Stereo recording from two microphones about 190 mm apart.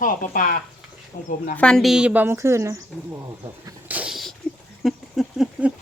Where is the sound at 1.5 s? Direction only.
5° left (ahead or behind); by 2.8 s 15° right (ahead or behind).